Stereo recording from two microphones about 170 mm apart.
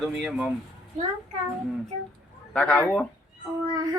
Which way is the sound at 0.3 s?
5° right (ahead or behind).